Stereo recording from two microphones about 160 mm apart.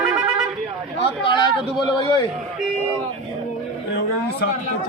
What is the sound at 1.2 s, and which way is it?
Speech, 30° left (ahead or behind).